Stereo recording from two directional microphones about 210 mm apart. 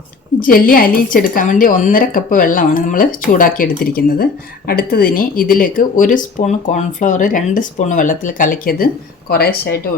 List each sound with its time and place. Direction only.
0.3 s a woman's voice: 40° left (ahead or behind)